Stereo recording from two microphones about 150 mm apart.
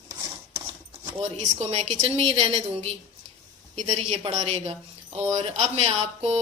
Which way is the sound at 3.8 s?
50° right (ahead or behind).